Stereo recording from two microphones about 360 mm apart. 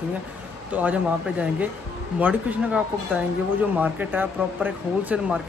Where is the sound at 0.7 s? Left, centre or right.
Centre.